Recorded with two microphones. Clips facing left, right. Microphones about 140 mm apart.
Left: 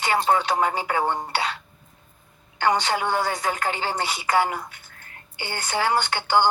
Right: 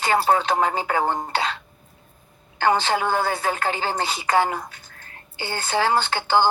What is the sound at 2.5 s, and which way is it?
Speech, 30° right (ahead or behind).